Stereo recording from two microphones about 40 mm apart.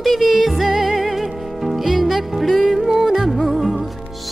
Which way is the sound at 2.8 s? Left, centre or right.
Centre.